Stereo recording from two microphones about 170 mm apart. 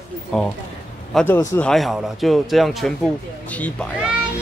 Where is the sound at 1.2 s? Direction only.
15° left (ahead or behind).